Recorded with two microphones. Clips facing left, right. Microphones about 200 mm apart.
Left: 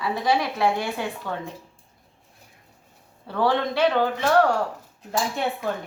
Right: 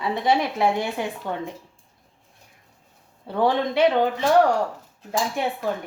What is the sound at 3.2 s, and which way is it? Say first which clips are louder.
A woman's voice: right 1 dB; 20° right (ahead or behind).